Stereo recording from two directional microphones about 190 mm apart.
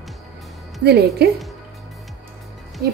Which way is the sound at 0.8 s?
60° right (ahead or behind).